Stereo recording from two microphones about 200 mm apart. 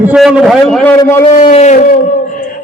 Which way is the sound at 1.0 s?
15° left (ahead or behind).